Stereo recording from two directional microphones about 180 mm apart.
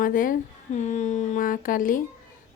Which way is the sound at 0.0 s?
50° left (ahead or behind).